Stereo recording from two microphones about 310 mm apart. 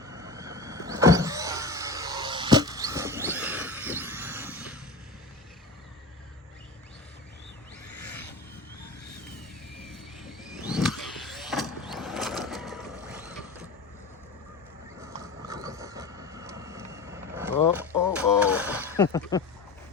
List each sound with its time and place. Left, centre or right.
0.0 s power windows: centre
7.9 s music: left
8.8 s vehicle: left
9.8 s vehicle: centre
15.4 s vehicle: centre
18.1 s a sound: centre
18.9 s speech: centre